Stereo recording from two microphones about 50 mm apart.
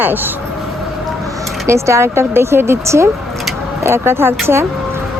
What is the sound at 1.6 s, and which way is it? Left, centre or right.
Speech, right.